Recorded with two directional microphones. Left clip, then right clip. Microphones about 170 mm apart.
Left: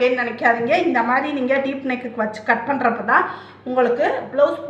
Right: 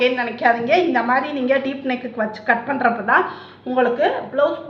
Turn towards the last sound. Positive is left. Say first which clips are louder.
# even
turn(degrees=-20)  # may be behind; listen again after turning